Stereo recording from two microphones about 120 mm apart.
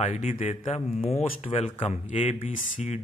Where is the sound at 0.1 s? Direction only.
65° left (ahead or behind).